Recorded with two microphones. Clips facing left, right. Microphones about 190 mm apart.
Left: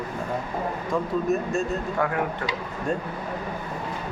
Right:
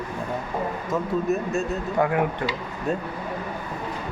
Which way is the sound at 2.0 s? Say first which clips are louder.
Right 4 dB; 20° right (ahead or behind).